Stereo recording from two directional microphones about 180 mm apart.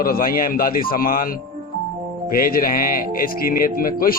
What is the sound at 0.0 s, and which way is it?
A man's voice, 55° left (ahead or behind).